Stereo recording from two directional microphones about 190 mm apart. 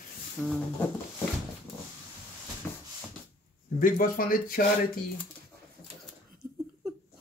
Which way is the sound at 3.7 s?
45° left (ahead or behind).